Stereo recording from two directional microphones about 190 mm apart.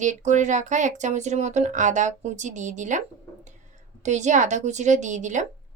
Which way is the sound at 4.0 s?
40° right (ahead or behind).